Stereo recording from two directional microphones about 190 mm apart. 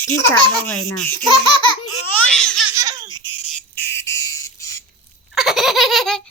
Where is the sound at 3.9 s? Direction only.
15° left (ahead or behind).